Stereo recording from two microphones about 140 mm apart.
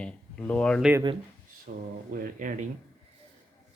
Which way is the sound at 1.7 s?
90° right.